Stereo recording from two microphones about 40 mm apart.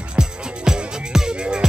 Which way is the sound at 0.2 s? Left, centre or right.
Centre.